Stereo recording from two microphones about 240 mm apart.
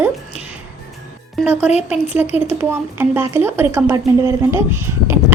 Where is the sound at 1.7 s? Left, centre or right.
Centre.